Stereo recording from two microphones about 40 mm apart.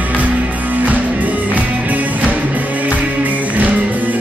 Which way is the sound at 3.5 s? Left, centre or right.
Right.